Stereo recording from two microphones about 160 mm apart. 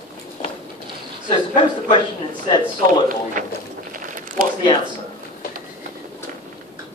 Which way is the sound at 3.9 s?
55° right (ahead or behind).